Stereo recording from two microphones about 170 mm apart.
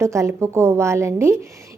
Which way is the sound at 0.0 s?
15° right (ahead or behind).